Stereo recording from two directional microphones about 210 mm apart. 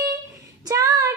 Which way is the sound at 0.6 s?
15° right (ahead or behind).